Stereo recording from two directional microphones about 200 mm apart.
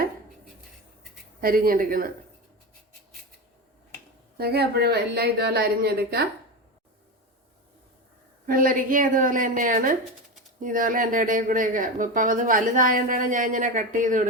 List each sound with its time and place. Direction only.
1.4 s a woman's voice: 45° right (ahead or behind)
4.4 s a woman's voice: 55° right (ahead or behind)
8.4 s speech: 45° right (ahead or behind)